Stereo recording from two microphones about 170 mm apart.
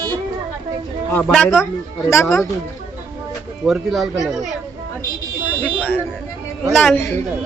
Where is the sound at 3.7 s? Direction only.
Centre (ahead or behind).